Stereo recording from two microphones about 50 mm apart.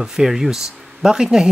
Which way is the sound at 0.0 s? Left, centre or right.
Centre.